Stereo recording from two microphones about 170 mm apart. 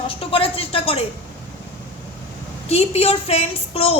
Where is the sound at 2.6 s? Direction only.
35° left (ahead or behind).